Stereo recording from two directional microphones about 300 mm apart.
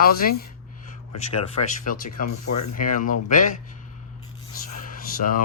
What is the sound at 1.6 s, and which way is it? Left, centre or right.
Speech, left.